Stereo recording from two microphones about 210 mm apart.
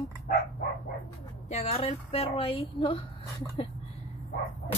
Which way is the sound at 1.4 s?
30° left (ahead or behind).